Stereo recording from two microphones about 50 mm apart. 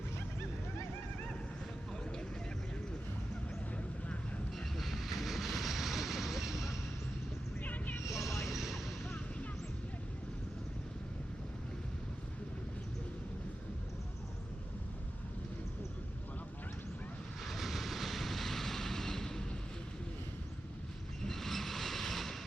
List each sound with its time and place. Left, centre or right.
4.5 s vehicle: centre
7.6 s vehicle: left
8.2 s a sound: left
8.5 s music: centre
17.4 s vehicle: centre
21.2 s vehicle: centre